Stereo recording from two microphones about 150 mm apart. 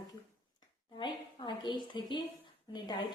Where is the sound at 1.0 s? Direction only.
30° left (ahead or behind).